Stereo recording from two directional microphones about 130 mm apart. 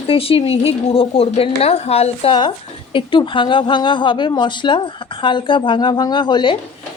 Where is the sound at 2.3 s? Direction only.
40° left (ahead or behind).